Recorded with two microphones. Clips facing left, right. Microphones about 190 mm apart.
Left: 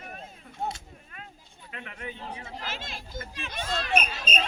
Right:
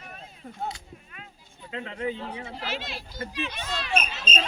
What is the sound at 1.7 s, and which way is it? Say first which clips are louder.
Speech: right 9 dB; 25° right (ahead or behind).